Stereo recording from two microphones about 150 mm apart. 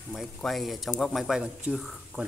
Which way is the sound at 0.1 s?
Centre (ahead or behind).